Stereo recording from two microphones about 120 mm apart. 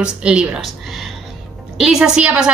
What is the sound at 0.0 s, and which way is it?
A woman's voice, 10° right (ahead or behind).